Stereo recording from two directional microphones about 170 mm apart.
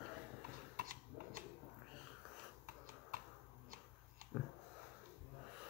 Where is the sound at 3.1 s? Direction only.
55° right (ahead or behind).